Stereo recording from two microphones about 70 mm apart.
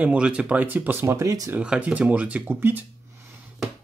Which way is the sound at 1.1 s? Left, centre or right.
Right.